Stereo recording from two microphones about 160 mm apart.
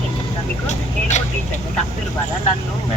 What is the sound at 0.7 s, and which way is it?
Speech, 45° left (ahead or behind).